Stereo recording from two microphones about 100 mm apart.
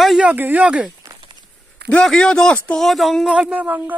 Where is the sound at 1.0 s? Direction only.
50° right (ahead or behind).